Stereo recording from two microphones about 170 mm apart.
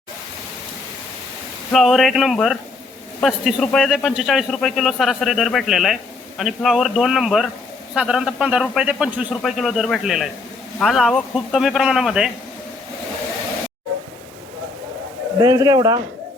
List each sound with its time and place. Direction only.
1.7 s speech: centre (ahead or behind)
15.4 s speech: 20° right (ahead or behind)